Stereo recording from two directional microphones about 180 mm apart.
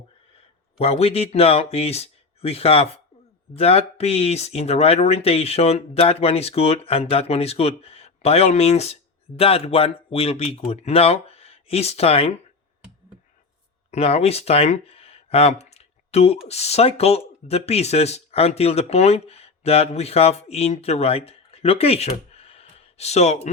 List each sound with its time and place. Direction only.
0.8 s speech: 35° left (ahead or behind)
13.9 s speech: 35° left (ahead or behind)